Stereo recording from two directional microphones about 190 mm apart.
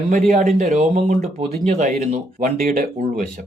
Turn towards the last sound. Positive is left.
turn(degrees=-50)  # may be behind; listen again after turning